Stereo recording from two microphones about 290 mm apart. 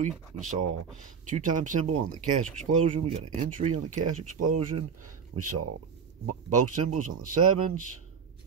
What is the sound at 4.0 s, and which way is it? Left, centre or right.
Speech, right.